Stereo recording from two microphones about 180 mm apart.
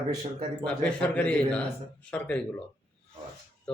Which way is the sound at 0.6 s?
5° left (ahead or behind).